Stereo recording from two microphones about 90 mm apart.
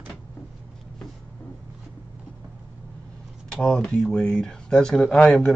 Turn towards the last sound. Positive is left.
turn(degrees=5)  # may be behind; listen again after turning